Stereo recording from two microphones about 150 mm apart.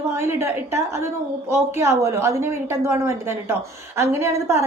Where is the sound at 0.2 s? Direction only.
15° right (ahead or behind).